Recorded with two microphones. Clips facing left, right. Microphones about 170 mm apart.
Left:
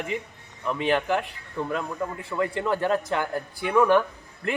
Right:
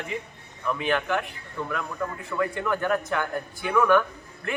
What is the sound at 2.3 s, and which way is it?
A man's voice, 25° left (ahead or behind).